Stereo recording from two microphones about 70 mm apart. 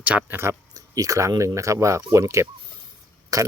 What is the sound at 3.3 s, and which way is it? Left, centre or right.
Speech, right.